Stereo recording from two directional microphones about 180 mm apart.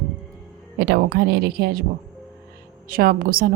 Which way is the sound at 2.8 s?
55° right (ahead or behind).